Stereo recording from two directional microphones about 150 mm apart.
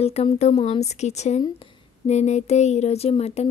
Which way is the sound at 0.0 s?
45° left (ahead or behind).